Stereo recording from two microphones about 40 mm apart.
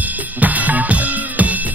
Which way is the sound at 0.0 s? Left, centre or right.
Right.